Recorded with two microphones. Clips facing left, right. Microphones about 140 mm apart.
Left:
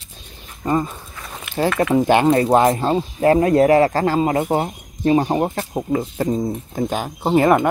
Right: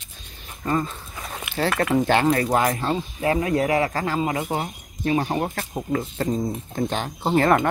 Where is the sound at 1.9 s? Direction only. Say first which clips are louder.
Left 5 dB; 20° left (ahead or behind).